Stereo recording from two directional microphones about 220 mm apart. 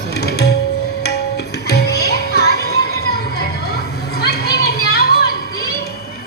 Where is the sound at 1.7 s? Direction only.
45° left (ahead or behind).